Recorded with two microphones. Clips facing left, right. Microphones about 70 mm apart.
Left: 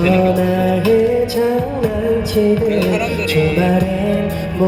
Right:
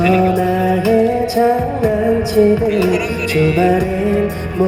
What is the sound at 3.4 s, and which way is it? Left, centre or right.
Music, right.